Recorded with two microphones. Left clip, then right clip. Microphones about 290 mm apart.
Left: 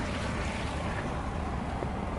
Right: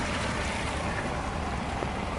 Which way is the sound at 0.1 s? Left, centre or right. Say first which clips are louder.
Right 4 dB; centre.